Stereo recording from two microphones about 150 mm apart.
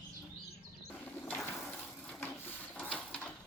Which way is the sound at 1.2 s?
15° left (ahead or behind).